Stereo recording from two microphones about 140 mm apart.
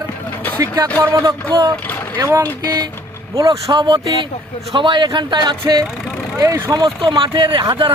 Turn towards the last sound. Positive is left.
turn(degrees=-35)  # may be behind; listen again after turning